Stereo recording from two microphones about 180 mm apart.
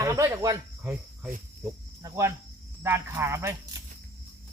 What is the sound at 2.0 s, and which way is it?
Speech, 15° right (ahead or behind).